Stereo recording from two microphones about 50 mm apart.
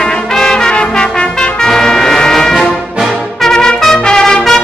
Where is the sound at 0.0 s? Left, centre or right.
Centre.